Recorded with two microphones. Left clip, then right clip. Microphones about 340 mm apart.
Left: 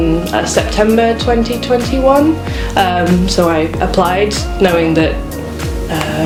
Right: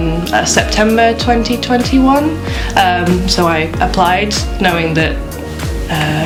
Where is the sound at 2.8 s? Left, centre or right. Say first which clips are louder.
Right 2 dB; right.